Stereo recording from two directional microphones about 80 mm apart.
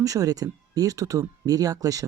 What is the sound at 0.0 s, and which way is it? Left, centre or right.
Speech, right.